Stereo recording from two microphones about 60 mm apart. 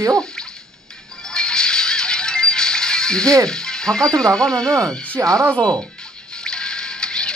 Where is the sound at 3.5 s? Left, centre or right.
Centre.